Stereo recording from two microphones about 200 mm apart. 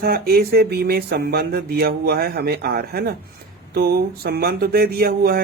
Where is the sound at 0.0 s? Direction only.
50° right (ahead or behind).